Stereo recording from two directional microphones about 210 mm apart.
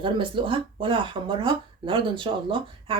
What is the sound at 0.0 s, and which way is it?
Speech, 25° right (ahead or behind).